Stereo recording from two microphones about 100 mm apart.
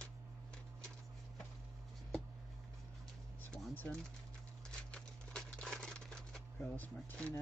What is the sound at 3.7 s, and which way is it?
Speech, 20° left (ahead or behind).